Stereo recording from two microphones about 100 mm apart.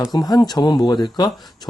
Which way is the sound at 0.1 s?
40° left (ahead or behind).